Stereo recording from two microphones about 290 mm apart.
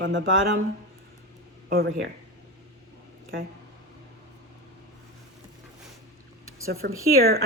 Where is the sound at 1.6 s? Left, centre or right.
Right.